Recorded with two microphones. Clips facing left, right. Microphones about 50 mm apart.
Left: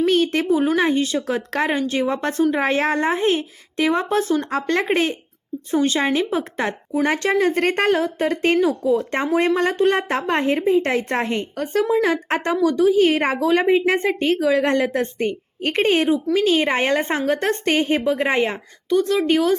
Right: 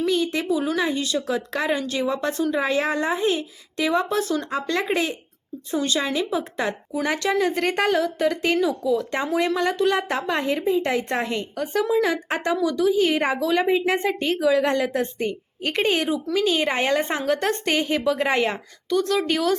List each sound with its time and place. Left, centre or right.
0.0 s speech: left
4.4 s a woman's voice: left; by 19.5 s centre